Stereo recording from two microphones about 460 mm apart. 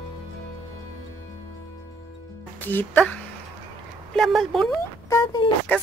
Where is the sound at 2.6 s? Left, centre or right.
Centre.